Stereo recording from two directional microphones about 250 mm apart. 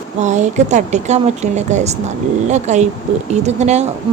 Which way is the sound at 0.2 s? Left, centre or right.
Right.